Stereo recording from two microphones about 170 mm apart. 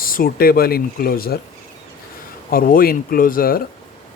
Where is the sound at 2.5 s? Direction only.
55° left (ahead or behind).